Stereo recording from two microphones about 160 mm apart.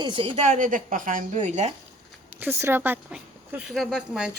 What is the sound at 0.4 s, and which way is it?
A woman's voice, 55° right (ahead or behind).